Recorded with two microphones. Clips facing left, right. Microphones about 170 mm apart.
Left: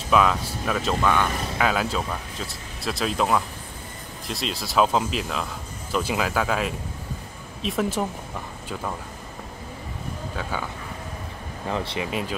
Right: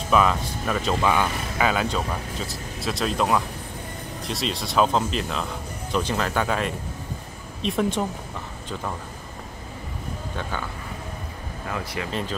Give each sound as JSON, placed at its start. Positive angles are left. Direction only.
{"t": 0.1, "sound": "speech", "side_deg": 0}
{"t": 11.7, "sound": "speech", "side_deg": 25}
{"t": 12.1, "sound": "speech", "side_deg": 10}